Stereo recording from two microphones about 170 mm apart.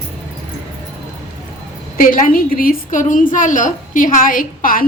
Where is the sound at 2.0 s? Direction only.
55° left (ahead or behind).